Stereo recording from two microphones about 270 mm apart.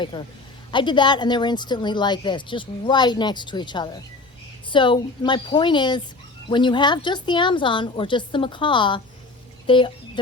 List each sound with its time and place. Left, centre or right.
0.0 s a woman's voice: centre